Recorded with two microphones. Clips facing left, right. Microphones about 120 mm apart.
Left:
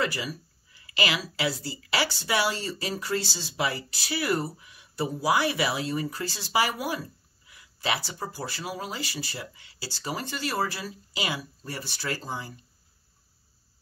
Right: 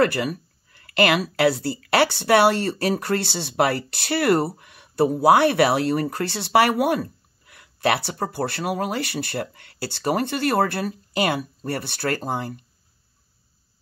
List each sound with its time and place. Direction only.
0.0 s speech: 60° right (ahead or behind)